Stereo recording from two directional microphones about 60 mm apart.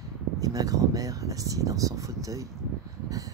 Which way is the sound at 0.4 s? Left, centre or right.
Right.